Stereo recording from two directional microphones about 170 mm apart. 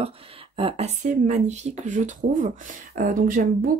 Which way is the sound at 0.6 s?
35° right (ahead or behind).